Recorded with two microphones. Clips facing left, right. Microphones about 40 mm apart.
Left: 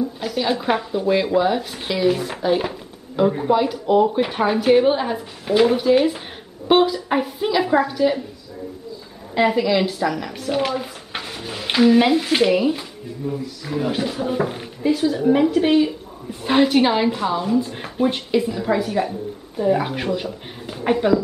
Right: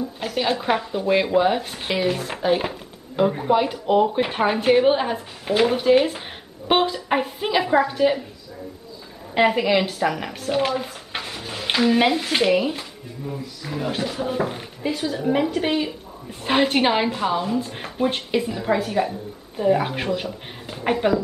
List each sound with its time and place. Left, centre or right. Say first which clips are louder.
0.0 s a woman's voice: left 2 dB; centre
9.4 s speech: even; right
9.8 s a woman's voice: left 1 dB; centre
10.0 s speech: even; right
10.4 s a woman's voice: even; centre